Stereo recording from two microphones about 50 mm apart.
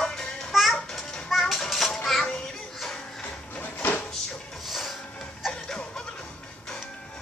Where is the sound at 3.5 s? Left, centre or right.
Left.